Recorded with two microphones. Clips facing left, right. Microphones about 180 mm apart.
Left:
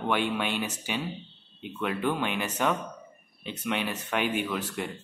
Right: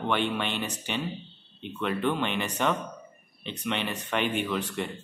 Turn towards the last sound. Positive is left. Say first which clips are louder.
# right 1 dB
turn(degrees=5)  # may be behind; listen again after turning